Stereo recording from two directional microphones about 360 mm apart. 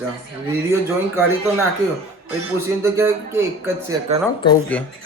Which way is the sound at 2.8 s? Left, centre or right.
Centre.